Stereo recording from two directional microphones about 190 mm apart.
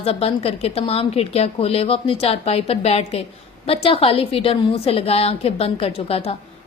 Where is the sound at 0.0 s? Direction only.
30° left (ahead or behind).